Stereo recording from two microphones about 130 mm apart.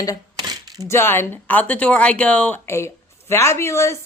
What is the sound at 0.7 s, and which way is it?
Speech, 20° left (ahead or behind).